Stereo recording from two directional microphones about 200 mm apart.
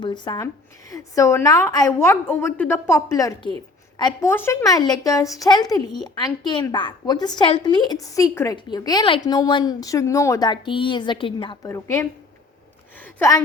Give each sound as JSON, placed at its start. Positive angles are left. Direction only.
{"t": 0.0, "sound": "a woman's voice", "side_deg": 20}
{"t": 11.7, "sound": "a woman's voice", "side_deg": 15}
{"t": 13.1, "sound": "a woman's voice", "side_deg": 15}